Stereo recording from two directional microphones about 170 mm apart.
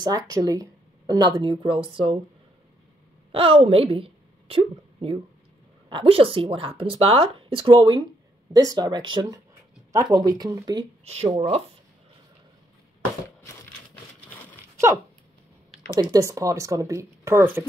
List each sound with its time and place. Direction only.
0.0 s a woman's voice: 20° right (ahead or behind)
3.3 s a woman's voice: 35° right (ahead or behind)
11.1 s speech: 40° right (ahead or behind)
15.9 s a woman's voice: 20° right (ahead or behind)